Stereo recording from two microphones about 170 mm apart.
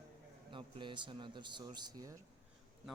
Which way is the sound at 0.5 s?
30° right (ahead or behind).